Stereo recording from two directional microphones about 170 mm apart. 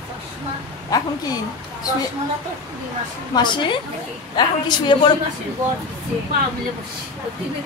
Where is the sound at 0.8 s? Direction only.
20° left (ahead or behind).